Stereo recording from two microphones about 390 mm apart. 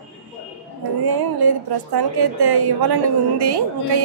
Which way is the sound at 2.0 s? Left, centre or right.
Right.